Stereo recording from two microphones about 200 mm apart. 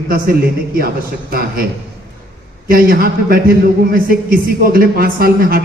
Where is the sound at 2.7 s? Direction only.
45° right (ahead or behind).